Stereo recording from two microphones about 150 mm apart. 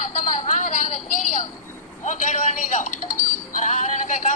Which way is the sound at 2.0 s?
55° left (ahead or behind).